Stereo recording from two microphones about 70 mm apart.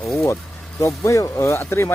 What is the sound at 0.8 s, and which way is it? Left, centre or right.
Speech, left.